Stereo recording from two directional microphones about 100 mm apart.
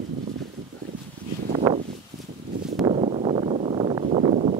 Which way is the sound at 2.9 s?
85° right.